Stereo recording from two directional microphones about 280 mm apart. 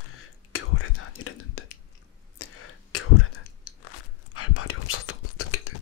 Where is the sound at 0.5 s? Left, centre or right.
Left.